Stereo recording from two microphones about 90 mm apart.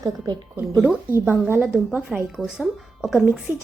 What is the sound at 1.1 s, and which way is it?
Speech, 25° right (ahead or behind).